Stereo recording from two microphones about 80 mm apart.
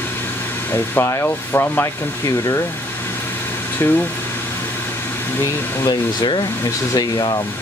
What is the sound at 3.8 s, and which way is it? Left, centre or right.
Speech, left.